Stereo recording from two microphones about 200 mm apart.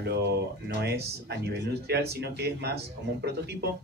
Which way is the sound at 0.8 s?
55° right (ahead or behind).